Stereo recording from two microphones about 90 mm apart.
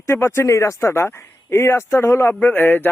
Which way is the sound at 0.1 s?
30° left (ahead or behind).